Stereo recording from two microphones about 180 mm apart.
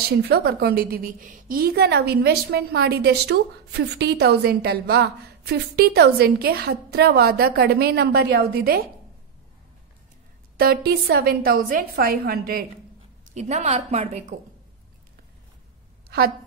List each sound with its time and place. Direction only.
0.2 s a woman's voice: 65° right (ahead or behind)
10.6 s a woman's voice: 60° right (ahead or behind)
13.3 s a woman's voice: 40° right (ahead or behind)